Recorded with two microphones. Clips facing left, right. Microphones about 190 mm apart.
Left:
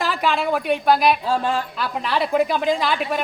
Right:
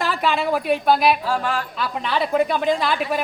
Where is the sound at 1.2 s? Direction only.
25° left (ahead or behind).